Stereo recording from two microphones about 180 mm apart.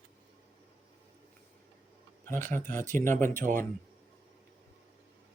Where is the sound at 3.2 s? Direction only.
45° right (ahead or behind).